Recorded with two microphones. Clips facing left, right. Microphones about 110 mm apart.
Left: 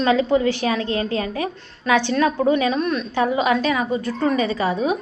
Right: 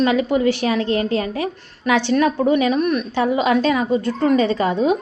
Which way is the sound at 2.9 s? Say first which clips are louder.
Right 1 dB; 20° right (ahead or behind).